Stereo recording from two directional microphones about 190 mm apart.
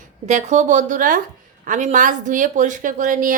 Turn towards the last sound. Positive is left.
turn(degrees=-45)  # may be behind; listen again after turning